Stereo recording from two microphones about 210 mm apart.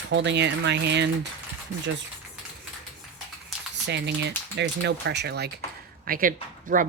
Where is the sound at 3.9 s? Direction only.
55° right (ahead or behind).